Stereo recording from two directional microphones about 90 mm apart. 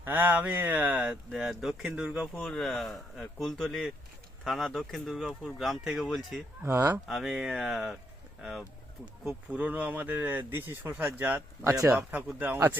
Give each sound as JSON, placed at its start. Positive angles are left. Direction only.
{"t": 0.0, "sound": "speech", "side_deg": -20}
{"t": 2.3, "sound": "speech", "side_deg": 5}
{"t": 6.7, "sound": "speech", "side_deg": -25}
{"t": 7.1, "sound": "speech", "side_deg": -5}
{"t": 11.6, "sound": "speech", "side_deg": -35}
{"t": 11.9, "sound": "speech", "side_deg": -20}